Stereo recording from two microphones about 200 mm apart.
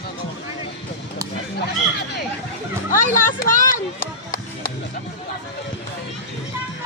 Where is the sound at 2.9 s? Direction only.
40° left (ahead or behind).